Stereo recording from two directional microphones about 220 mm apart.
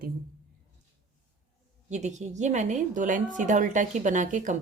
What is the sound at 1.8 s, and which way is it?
A woman's voice, 30° right (ahead or behind).